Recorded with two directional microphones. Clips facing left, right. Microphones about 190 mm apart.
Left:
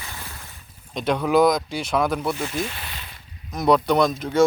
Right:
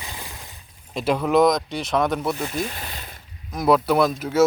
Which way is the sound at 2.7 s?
40° right (ahead or behind).